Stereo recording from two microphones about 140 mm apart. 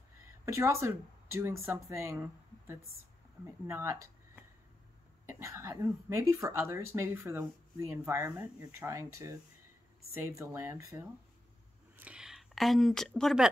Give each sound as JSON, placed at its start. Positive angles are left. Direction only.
{"t": 0.5, "sound": "speech", "side_deg": -20}
{"t": 5.3, "sound": "speech", "side_deg": -20}
{"t": 12.0, "sound": "speech", "side_deg": -5}